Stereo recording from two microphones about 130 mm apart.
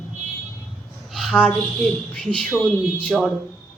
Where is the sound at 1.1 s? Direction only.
Centre (ahead or behind).